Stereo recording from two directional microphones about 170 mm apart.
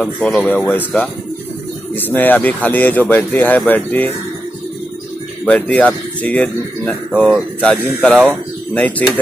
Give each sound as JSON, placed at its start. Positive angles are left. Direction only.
{"t": 0.0, "sound": "speech", "side_deg": 5}
{"t": 5.4, "sound": "speech", "side_deg": 10}